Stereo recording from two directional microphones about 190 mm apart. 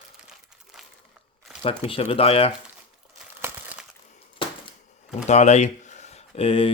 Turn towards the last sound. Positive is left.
turn(degrees=30)  # may be behind; listen again after turning